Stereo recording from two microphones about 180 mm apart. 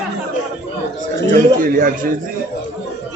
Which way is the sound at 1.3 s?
50° right (ahead or behind).